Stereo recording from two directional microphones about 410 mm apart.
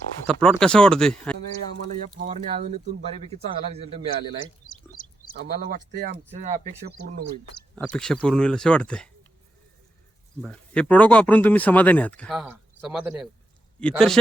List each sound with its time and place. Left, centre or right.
0.3 s speech: centre
2.1 s speech: centre
4.7 s a sound: centre
5.4 s speech: right
7.8 s speech: centre
10.4 s speech: centre